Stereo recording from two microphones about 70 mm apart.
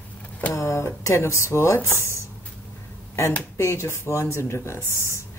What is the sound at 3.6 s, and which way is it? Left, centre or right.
Speech, left.